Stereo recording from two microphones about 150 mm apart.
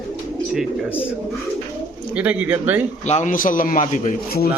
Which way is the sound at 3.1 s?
55° left (ahead or behind).